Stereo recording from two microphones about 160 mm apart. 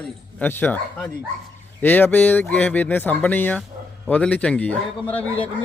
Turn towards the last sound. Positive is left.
turn(degrees=10)  # may be behind; listen again after turning